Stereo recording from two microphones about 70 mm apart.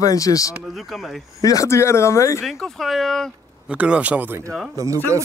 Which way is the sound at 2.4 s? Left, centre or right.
Centre.